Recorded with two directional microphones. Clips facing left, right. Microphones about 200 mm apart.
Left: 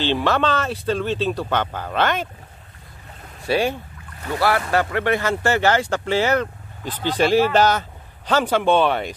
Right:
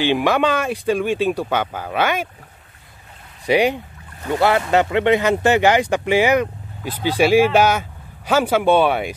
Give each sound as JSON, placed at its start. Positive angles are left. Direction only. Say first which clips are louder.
{"t": 0.0, "sound": "speech", "louder": "right 3 dB", "side_deg": -10}
{"t": 3.4, "sound": "speech", "louder": "right 4 dB", "side_deg": -15}